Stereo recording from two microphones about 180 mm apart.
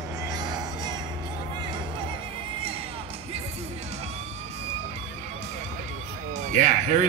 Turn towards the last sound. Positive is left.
turn(degrees=-40)  # may be behind; listen again after turning